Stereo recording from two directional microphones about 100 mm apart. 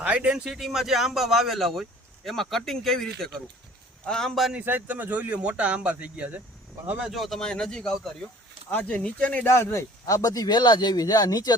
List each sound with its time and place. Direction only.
0.0 s speech: 15° right (ahead or behind); by 4.5 s centre (ahead or behind)
4.5 s speech: 15° right (ahead or behind)
7.0 s speech: centre (ahead or behind)
9.5 s speech: 25° left (ahead or behind)